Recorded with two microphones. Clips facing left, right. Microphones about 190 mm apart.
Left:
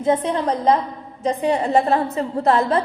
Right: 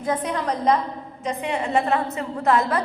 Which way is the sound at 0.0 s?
25° left (ahead or behind).